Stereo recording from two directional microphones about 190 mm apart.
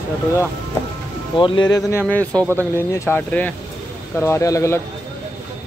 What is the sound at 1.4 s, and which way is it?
Speech, 25° left (ahead or behind).